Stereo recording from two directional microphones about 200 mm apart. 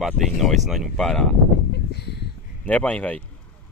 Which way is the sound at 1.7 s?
55° left (ahead or behind).